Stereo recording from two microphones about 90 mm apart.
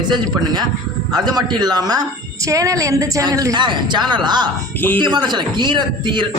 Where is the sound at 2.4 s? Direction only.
35° right (ahead or behind).